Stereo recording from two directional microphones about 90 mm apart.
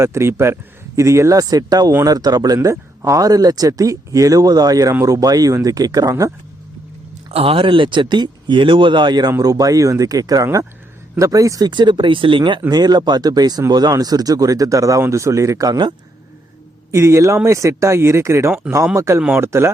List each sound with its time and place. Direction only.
0.0 s speech: 30° right (ahead or behind)
7.3 s speech: 90° right; by 9.3 s 55° right (ahead or behind)
9.4 s speech: 40° right (ahead or behind)
11.7 s speech: 60° right (ahead or behind)
12.7 s speech: 50° right (ahead or behind)
16.9 s speech: 35° right (ahead or behind)